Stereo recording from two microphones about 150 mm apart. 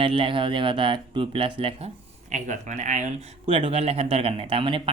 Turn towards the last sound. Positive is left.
turn(degrees=-35)  # may be behind; listen again after turning